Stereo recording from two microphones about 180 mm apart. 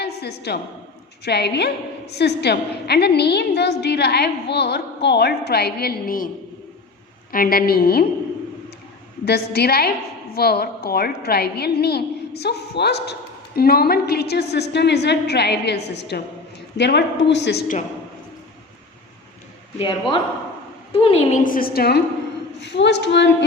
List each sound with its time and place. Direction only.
0.0 s a woman's voice: 65° left (ahead or behind)
9.2 s a woman's voice: 65° left (ahead or behind)
19.8 s a man's voice: 30° left (ahead or behind); by 22.0 s 60° left (ahead or behind)
22.6 s a woman's voice: 75° left (ahead or behind)